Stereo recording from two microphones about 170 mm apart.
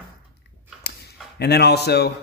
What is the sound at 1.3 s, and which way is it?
Speech, 75° left (ahead or behind).